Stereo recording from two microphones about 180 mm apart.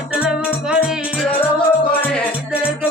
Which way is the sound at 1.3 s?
10° left (ahead or behind).